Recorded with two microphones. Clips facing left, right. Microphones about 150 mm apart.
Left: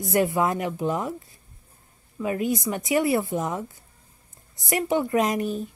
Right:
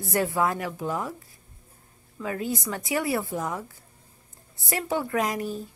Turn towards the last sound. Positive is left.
turn(degrees=20)  # may be behind; listen again after turning